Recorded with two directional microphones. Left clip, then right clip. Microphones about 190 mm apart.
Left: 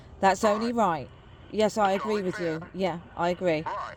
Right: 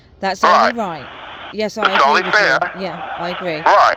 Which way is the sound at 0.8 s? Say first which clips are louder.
Right 2 dB; 10° right (ahead or behind).